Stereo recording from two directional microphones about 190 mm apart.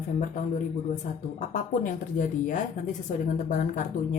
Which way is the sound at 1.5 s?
45° left (ahead or behind).